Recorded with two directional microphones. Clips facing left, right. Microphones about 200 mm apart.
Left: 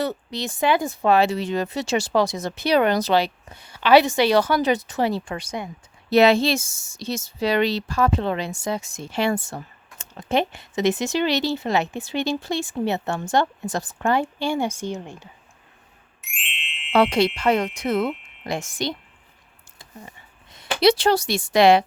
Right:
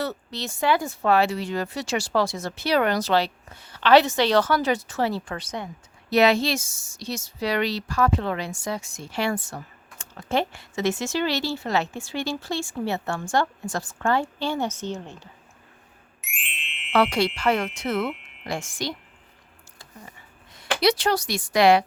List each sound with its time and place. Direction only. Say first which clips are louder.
0.0 s speech: left 4 dB; 15° left (ahead or behind)
6.1 s a woman's voice: left 3 dB; 25° left (ahead or behind)
16.9 s a woman's voice: left 3 dB; 20° left (ahead or behind)
20.5 s speech: left 4 dB; 25° left (ahead or behind)